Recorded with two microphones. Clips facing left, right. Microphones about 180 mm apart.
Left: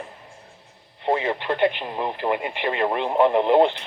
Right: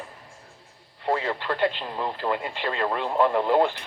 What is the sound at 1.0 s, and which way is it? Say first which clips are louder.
Speech: left 3 dB; 20° left (ahead or behind).